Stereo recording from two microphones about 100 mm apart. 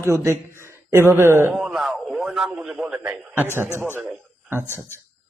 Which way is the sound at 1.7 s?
Centre (ahead or behind).